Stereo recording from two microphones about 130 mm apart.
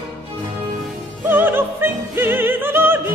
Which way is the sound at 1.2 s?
15° right (ahead or behind).